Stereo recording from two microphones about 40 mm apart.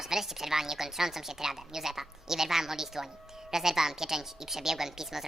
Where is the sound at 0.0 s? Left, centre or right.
Centre.